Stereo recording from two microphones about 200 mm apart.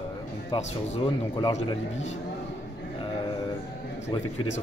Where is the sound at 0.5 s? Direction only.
25° left (ahead or behind).